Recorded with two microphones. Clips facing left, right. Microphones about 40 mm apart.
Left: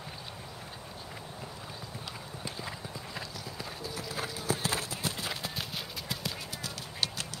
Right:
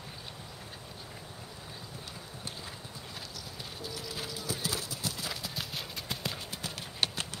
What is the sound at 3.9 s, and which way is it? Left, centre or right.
Clip-clop, left.